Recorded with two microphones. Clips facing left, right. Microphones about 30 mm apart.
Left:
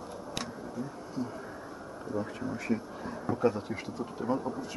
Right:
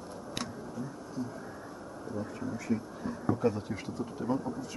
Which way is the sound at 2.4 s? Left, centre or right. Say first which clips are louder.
Right 1 dB; left.